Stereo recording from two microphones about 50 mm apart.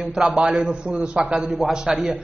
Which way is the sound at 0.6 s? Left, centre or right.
Right.